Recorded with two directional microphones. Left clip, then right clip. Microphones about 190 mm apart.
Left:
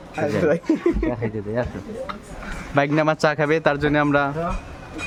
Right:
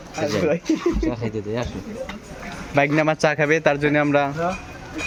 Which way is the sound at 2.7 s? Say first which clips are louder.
Right 1 dB; 15° left (ahead or behind).